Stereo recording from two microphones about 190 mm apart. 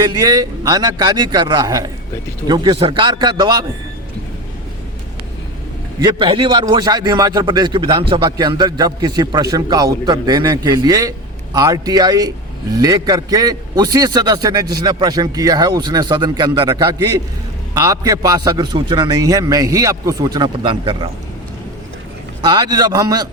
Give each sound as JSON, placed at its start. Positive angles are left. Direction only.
{"t": 0.0, "sound": "a man's voice", "side_deg": -20}
{"t": 6.0, "sound": "a man's voice", "side_deg": -25}
{"t": 22.4, "sound": "a man's voice", "side_deg": -20}